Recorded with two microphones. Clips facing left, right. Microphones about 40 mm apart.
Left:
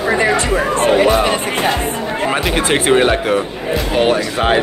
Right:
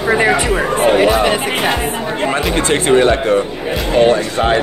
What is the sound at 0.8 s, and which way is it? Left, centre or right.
Speech, centre.